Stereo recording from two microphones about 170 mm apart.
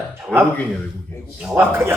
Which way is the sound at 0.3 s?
5° left (ahead or behind).